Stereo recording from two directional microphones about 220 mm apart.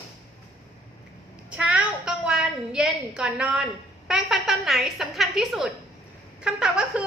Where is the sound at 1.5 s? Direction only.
5° right (ahead or behind).